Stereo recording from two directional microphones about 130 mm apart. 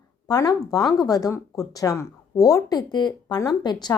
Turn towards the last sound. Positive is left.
turn(degrees=35)  # may be behind; listen again after turning